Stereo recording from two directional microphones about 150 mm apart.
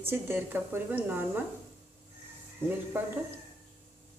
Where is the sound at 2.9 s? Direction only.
15° right (ahead or behind).